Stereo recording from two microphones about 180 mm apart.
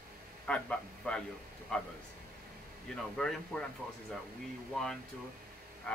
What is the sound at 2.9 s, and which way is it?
Speech, 5° left (ahead or behind).